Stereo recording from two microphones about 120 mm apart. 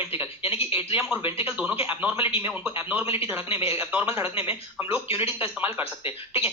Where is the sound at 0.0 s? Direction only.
20° right (ahead or behind).